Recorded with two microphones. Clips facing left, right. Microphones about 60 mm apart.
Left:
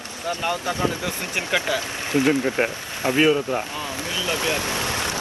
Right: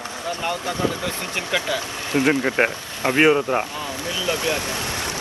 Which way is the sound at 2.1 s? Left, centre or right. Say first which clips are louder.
Right 1 dB; right.